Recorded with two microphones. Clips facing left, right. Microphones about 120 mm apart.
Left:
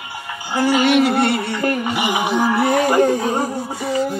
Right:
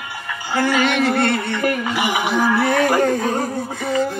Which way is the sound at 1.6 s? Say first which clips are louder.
Even; 25° left (ahead or behind).